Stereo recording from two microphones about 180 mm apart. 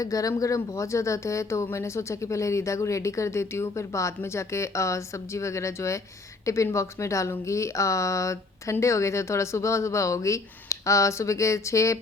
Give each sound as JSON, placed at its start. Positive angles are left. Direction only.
{"t": 0.0, "sound": "speech", "side_deg": 20}